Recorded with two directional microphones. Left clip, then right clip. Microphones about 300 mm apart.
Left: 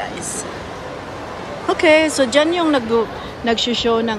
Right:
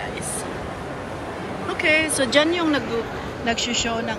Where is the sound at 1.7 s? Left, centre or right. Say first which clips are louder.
Left 6 dB; centre.